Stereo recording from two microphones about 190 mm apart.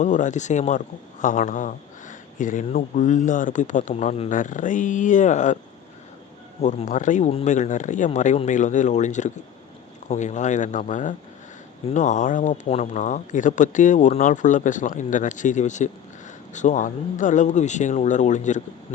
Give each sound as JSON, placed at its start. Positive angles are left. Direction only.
{"t": 0.0, "sound": "speech", "side_deg": 40}
{"t": 6.6, "sound": "speech", "side_deg": 35}